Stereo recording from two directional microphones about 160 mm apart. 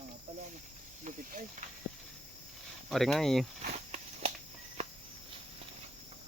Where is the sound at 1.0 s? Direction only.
55° right (ahead or behind).